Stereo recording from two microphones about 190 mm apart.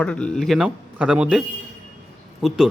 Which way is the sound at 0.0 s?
5° left (ahead or behind).